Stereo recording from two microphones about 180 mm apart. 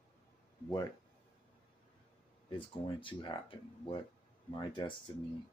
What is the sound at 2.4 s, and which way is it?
Speech, 25° left (ahead or behind).